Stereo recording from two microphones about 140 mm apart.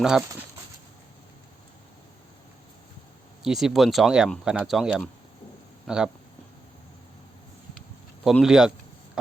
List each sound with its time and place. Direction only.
0.0 s speech: 5° right (ahead or behind)
3.4 s speech: centre (ahead or behind)
8.2 s speech: centre (ahead or behind)